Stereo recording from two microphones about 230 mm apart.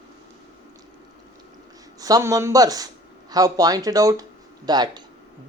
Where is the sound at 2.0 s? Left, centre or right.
Centre.